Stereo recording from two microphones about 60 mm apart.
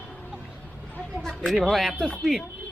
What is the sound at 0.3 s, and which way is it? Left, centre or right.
Music, centre.